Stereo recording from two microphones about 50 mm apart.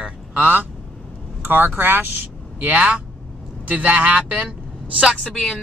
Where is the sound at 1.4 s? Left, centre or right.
Right.